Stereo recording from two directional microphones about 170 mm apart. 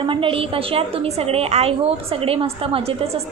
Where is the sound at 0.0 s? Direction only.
30° right (ahead or behind).